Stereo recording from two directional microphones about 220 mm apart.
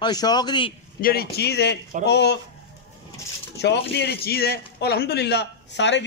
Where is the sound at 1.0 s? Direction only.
45° left (ahead or behind).